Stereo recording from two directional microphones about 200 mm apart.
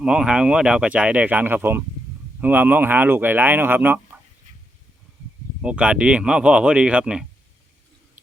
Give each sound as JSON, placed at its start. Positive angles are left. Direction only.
{"t": 0.0, "sound": "speech", "side_deg": -5}
{"t": 5.6, "sound": "speech", "side_deg": -5}